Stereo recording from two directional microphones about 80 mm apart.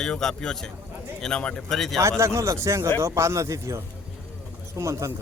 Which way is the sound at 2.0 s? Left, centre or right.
Right.